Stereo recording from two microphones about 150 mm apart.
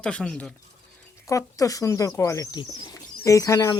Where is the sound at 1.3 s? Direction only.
20° left (ahead or behind).